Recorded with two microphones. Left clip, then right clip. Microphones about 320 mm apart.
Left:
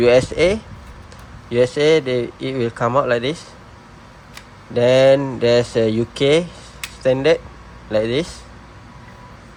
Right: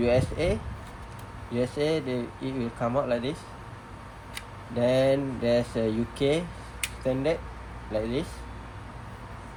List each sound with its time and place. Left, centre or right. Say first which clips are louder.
0.0 s speech: left 12 dB; left
4.8 s speech: left 11 dB; left